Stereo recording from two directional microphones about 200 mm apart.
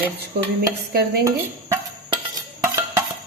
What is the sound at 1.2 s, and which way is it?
Dishes, 15° right (ahead or behind).